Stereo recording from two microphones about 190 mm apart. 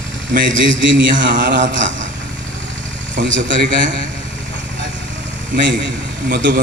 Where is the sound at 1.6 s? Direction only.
75° right (ahead or behind).